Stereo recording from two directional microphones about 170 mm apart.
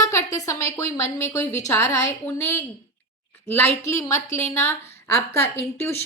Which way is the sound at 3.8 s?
15° left (ahead or behind).